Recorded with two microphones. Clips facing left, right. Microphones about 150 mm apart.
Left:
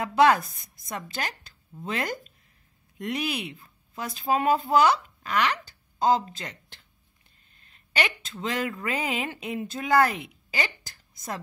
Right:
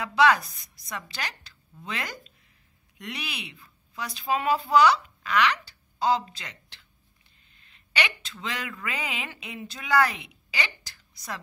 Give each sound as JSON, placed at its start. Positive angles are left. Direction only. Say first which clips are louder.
{"t": 0.0, "sound": "a woman's voice", "louder": "left 2 dB", "side_deg": 50}